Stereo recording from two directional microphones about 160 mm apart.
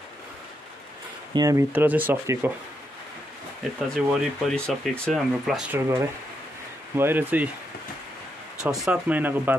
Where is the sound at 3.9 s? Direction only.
5° left (ahead or behind).